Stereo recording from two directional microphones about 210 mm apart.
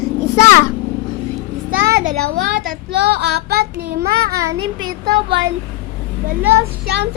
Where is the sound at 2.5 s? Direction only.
45° right (ahead or behind).